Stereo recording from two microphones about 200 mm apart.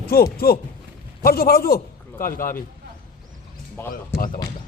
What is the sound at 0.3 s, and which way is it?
A man's voice, 50° left (ahead or behind).